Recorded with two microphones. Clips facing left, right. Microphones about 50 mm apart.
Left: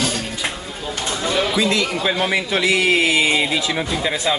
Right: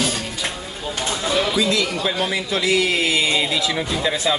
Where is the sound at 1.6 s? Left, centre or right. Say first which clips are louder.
Left 1 dB; left.